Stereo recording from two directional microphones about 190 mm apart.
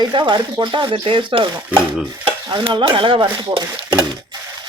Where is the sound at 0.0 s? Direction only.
25° right (ahead or behind).